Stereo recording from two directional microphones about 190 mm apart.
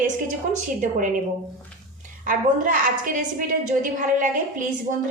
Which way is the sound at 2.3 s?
45° right (ahead or behind).